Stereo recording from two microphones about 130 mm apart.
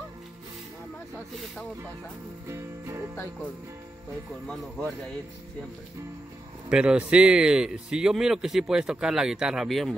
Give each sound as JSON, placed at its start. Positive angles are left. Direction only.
{"t": 2.4, "sound": "music", "side_deg": -20}
{"t": 4.5, "sound": "a man's voice", "side_deg": 5}
{"t": 6.7, "sound": "a man's voice", "side_deg": -5}